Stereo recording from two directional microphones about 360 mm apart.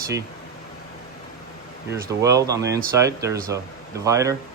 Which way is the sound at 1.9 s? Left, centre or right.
Centre.